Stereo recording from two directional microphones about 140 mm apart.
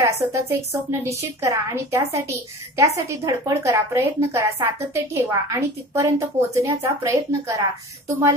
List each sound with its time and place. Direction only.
0.0 s a woman's voice: 20° right (ahead or behind)